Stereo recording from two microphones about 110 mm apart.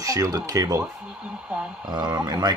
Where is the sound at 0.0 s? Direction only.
30° right (ahead or behind).